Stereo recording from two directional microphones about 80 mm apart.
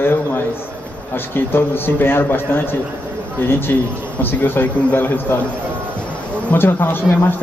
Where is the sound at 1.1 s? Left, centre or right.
Left.